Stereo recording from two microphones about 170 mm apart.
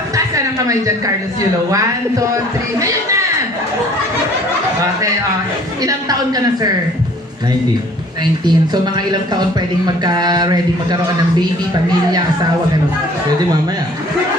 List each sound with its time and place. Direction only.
0.3 s speech: 20° right (ahead or behind)
5.8 s speech: 20° right (ahead or behind)
8.2 s speech: 25° right (ahead or behind)